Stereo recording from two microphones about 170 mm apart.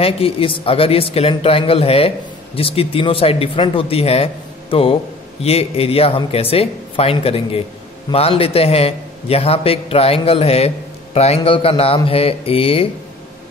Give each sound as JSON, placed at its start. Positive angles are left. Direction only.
{"t": 0.0, "sound": "speech", "side_deg": 35}